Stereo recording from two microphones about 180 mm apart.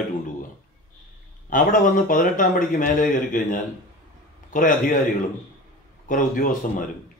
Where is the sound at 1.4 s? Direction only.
50° left (ahead or behind).